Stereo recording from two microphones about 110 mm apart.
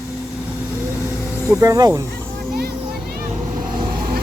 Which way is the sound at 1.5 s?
30° right (ahead or behind).